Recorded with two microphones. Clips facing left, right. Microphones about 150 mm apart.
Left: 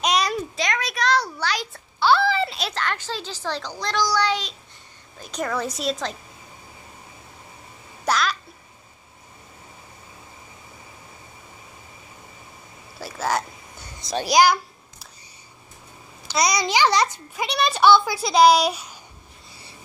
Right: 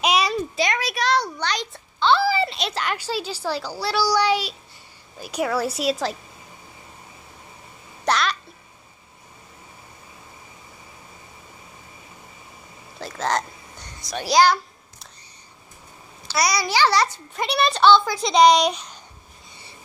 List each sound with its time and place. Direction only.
0.0 s a sound: 5° right (ahead or behind)
2.7 s a child's voice: 10° right (ahead or behind)
8.0 s babbling: centre (ahead or behind)
13.0 s a sound: 5° left (ahead or behind)
14.2 s speech: 15° left (ahead or behind)
16.3 s a child's voice: 20° left (ahead or behind)
17.4 s a child's voice: centre (ahead or behind)
17.7 s speech: 10° left (ahead or behind)
19.5 s a sound: centre (ahead or behind)